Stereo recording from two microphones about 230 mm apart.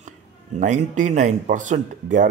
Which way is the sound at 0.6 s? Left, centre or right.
Right.